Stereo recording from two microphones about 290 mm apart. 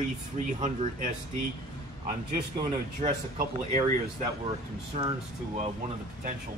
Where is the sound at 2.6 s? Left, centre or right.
Right.